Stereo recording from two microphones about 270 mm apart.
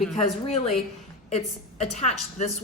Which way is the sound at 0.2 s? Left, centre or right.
Left.